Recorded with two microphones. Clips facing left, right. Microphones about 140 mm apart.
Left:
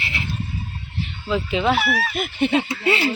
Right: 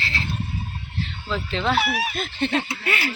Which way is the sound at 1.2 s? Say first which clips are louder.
Left 5 dB; 10° left (ahead or behind).